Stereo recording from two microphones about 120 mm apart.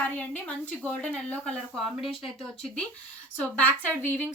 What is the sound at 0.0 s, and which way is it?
A woman's voice, 15° left (ahead or behind).